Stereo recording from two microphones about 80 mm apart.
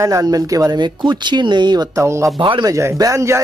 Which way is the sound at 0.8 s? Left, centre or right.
Right.